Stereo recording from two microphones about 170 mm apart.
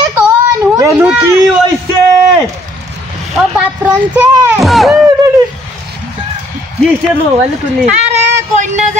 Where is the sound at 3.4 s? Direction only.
5° right (ahead or behind).